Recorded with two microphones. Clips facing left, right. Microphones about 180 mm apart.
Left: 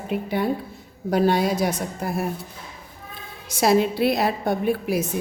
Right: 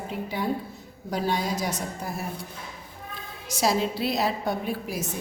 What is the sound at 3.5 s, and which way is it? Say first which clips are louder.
A woman's voice: left 6 dB; 60° left (ahead or behind).